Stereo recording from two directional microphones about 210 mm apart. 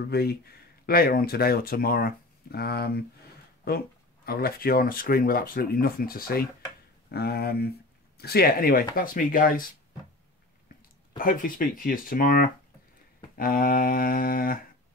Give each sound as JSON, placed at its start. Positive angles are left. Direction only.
{"t": 0.1, "sound": "speech", "side_deg": 50}
{"t": 11.1, "sound": "speech", "side_deg": 40}